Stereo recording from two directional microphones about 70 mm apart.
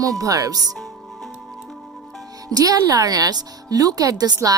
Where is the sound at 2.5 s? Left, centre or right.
Right.